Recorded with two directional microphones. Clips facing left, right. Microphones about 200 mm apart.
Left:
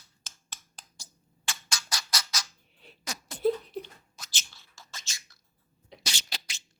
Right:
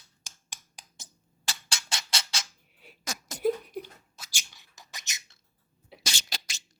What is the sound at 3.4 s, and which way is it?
Beatboxing, 10° right (ahead or behind).